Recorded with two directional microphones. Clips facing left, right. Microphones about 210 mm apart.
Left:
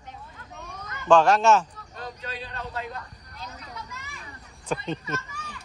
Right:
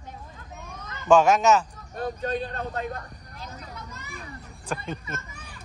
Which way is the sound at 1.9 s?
55° right (ahead or behind).